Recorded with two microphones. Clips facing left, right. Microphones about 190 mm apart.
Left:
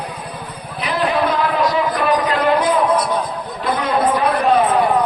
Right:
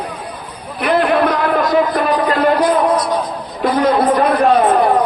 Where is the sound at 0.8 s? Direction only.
55° right (ahead or behind).